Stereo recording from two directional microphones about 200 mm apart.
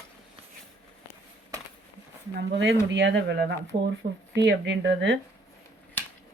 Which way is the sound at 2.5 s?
65° right (ahead or behind).